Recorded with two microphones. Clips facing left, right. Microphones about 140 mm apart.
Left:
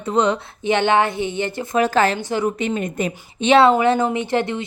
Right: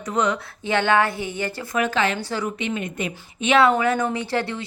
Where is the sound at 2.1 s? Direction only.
20° left (ahead or behind).